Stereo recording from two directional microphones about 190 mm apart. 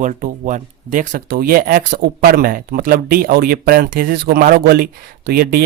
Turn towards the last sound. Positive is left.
turn(degrees=-55)  # may be behind; listen again after turning